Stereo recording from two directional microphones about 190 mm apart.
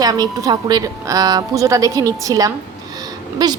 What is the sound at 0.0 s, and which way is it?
A woman's voice, 20° right (ahead or behind).